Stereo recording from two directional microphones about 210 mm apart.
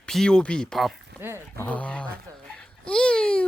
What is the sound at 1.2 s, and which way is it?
Speech, 10° right (ahead or behind).